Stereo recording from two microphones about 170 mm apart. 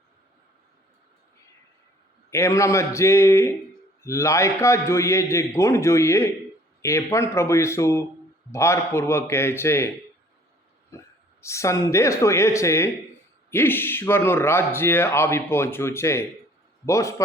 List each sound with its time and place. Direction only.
2.3 s speech: 15° left (ahead or behind)
10.9 s a man's voice: 15° left (ahead or behind)